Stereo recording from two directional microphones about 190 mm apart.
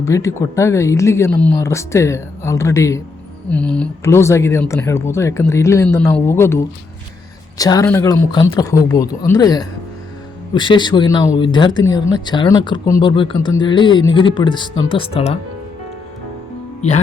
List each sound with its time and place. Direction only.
0.0 s speech: 15° left (ahead or behind)
7.6 s speech: 20° left (ahead or behind)
16.8 s speech: 35° left (ahead or behind)